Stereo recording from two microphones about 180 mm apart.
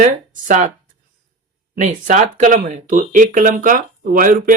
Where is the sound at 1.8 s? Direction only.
40° right (ahead or behind).